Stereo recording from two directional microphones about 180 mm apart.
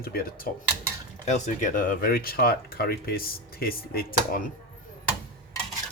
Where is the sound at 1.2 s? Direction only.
40° left (ahead or behind).